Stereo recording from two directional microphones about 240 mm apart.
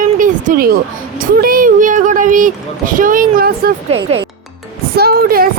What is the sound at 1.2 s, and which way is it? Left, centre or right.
Speech, right.